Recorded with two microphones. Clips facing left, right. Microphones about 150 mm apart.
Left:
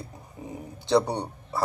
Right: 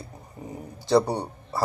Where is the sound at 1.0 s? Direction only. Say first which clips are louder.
Right 3 dB; 5° right (ahead or behind).